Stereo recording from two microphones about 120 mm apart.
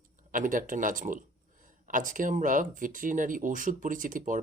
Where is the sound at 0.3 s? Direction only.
90° right.